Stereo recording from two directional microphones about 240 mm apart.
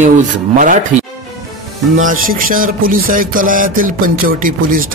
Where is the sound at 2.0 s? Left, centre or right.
Right.